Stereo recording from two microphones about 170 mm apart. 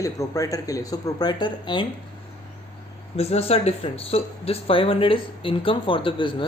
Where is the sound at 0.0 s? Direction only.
20° left (ahead or behind).